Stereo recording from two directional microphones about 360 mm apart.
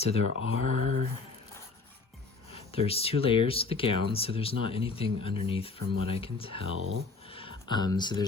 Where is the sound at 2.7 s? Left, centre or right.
Centre.